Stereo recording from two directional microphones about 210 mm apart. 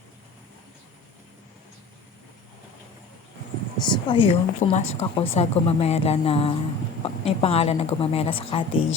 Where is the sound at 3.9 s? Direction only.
25° left (ahead or behind).